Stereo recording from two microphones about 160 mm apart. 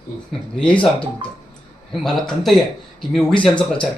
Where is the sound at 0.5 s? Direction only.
5° left (ahead or behind).